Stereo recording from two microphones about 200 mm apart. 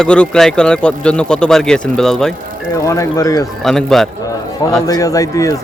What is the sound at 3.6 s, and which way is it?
Speech, centre (ahead or behind).